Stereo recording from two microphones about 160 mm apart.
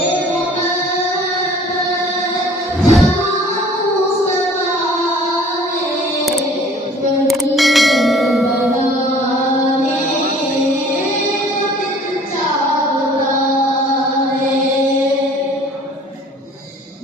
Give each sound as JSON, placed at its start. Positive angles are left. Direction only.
{"t": 2.8, "sound": "music", "side_deg": 0}
{"t": 7.3, "sound": "bell", "side_deg": 0}